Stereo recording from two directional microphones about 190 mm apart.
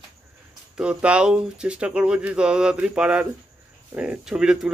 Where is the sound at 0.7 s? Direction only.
5° right (ahead or behind).